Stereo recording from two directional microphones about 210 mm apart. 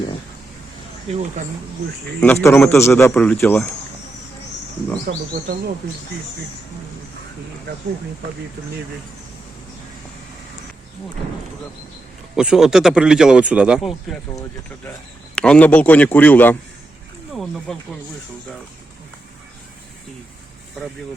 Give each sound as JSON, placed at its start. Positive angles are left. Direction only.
{"t": 2.2, "sound": "speech", "side_deg": 10}
{"t": 5.1, "sound": "speech", "side_deg": -45}
{"t": 12.4, "sound": "speech", "side_deg": -5}
{"t": 15.4, "sound": "speech", "side_deg": 5}